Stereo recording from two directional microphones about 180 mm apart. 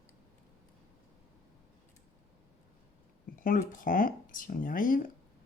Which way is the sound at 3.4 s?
50° left (ahead or behind).